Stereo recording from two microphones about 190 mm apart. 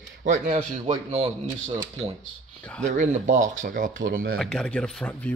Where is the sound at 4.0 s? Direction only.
55° right (ahead or behind).